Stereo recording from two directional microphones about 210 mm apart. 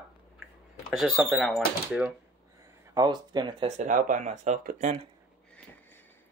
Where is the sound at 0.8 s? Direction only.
Centre (ahead or behind).